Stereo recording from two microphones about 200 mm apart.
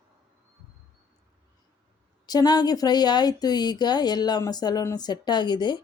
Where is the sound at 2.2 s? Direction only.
20° left (ahead or behind).